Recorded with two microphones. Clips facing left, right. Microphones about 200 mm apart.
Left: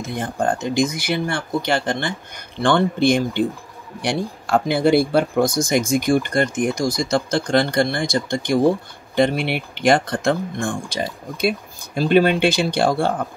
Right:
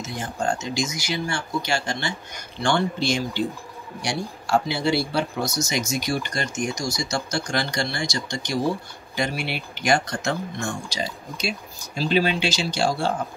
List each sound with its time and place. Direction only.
0.0 s speech: 55° left (ahead or behind)